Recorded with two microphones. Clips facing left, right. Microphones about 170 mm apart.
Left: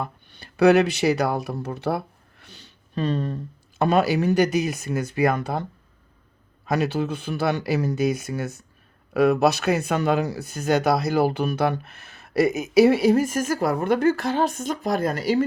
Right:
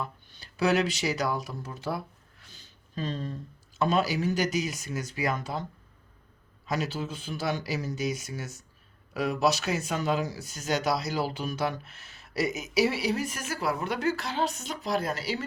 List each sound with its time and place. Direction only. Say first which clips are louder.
0.0 s speech: left 5 dB; 60° left (ahead or behind)
6.7 s speech: left 8 dB; 60° left (ahead or behind)